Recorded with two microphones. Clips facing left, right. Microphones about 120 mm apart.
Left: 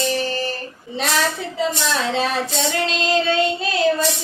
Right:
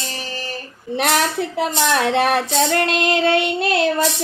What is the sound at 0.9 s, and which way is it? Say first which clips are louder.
A woman's voice: right 3 dB; 65° right (ahead or behind).